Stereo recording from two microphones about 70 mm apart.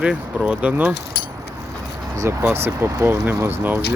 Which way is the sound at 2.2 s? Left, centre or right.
Right.